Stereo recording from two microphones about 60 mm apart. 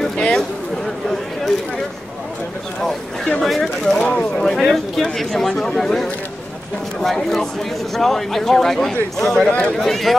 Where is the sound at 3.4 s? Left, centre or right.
Centre.